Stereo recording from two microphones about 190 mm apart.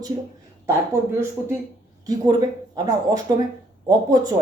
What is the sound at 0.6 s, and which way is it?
Speech, 15° right (ahead or behind).